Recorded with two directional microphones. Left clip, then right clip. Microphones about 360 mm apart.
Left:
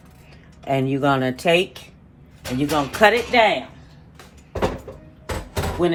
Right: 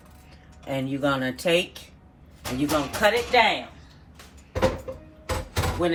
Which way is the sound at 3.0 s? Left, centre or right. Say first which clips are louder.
Left 5 dB; left.